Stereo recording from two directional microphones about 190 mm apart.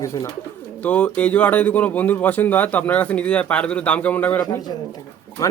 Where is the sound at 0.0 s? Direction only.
15° left (ahead or behind).